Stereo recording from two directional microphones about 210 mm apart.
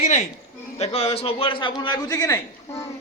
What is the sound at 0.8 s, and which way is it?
A man's voice, 30° left (ahead or behind).